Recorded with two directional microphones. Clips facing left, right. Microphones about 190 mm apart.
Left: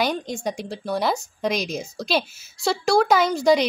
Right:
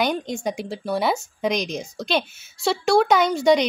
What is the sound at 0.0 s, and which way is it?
Speech, centre (ahead or behind).